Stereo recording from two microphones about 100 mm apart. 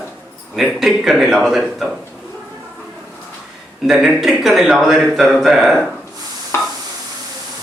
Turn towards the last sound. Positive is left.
turn(degrees=25)  # may be behind; listen again after turning